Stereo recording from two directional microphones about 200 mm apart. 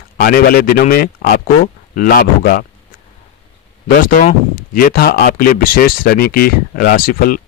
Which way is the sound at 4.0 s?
45° left (ahead or behind).